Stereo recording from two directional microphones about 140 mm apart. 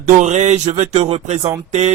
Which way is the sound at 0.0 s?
60° right (ahead or behind).